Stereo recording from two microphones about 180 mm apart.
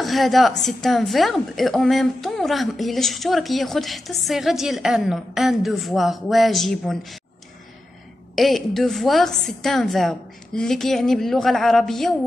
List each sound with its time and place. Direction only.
0.0 s a woman's voice: centre (ahead or behind)
8.4 s a woman's voice: centre (ahead or behind)